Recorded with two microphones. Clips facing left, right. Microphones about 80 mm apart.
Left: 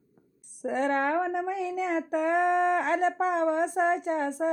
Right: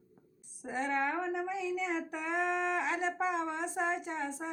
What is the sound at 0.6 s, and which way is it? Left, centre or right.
A woman's voice, left.